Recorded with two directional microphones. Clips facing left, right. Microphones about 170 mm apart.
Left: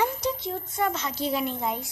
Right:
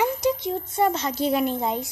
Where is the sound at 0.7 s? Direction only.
30° right (ahead or behind).